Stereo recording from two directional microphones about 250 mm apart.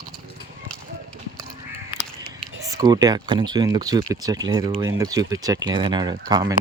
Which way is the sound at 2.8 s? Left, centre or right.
Centre.